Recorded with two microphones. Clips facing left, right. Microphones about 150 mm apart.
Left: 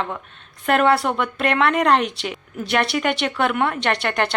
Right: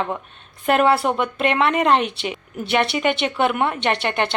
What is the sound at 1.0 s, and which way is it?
Speech, centre (ahead or behind).